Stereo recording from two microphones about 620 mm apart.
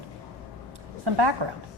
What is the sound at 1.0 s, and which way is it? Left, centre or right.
Speech, right.